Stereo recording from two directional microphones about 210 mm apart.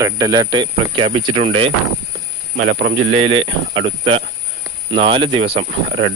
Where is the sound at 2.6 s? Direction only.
60° right (ahead or behind).